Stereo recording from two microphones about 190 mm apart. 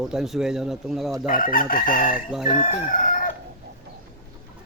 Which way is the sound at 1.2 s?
45° left (ahead or behind).